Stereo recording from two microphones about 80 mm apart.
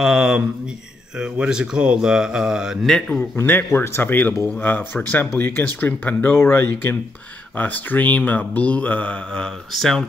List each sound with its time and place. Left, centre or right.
0.0 s speech: centre
2.9 s speech: centre
3.3 s speech: left; by 10.0 s centre